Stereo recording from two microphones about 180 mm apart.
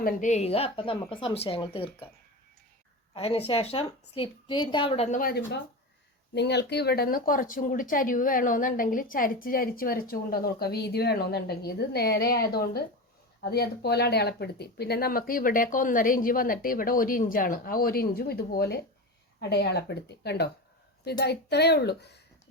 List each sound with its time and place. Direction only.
0.0 s a woman's voice: 45° left (ahead or behind)
3.2 s a woman's voice: 30° left (ahead or behind); by 5.4 s 50° left (ahead or behind)
6.3 s a woman's voice: 70° left (ahead or behind)